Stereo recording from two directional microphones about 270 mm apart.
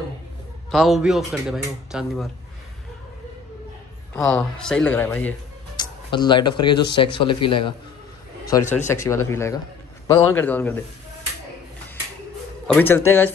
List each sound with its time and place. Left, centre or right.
0.7 s speech: centre
4.1 s speech: centre
8.8 s speech: centre
12.6 s speech: centre